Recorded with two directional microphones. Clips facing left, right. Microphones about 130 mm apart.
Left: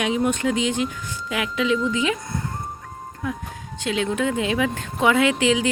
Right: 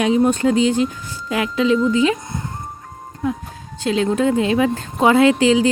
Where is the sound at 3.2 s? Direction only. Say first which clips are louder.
Right 6 dB; 30° right (ahead or behind).